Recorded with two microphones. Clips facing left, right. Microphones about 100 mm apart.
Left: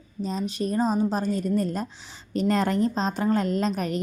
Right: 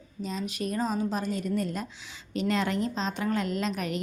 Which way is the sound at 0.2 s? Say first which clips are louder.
Left 5 dB; 35° left (ahead or behind).